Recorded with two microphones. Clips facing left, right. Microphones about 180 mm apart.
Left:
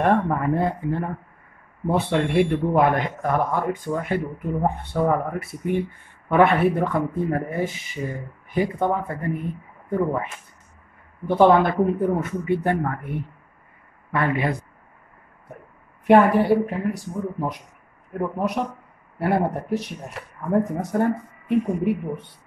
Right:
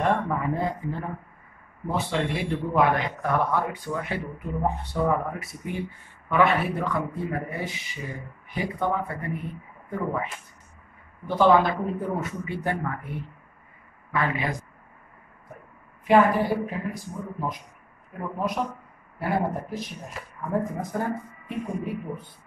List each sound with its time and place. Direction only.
0.0 s a man's voice: 60° left (ahead or behind)
16.1 s speech: 70° left (ahead or behind)
18.1 s a man's voice: 55° left (ahead or behind)
19.1 s speech: 70° left (ahead or behind)